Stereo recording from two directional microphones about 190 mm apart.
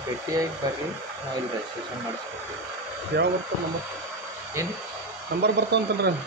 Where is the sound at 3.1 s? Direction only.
60° right (ahead or behind).